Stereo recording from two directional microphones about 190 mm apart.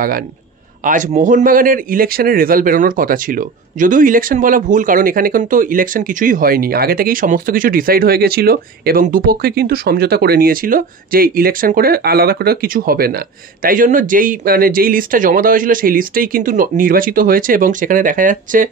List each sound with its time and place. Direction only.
0.8 s a man's voice: 40° right (ahead or behind)